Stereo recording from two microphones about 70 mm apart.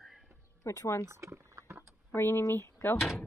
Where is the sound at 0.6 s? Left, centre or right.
Left.